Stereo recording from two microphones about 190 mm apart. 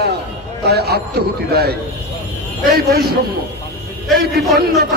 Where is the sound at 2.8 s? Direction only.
55° right (ahead or behind).